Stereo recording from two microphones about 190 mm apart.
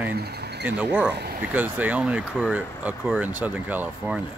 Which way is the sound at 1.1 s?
55° right (ahead or behind).